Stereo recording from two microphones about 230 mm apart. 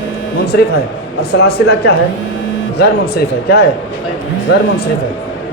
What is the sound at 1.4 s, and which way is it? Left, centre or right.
Speech, left.